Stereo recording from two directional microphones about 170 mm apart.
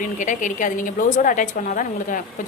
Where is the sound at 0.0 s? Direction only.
50° left (ahead or behind).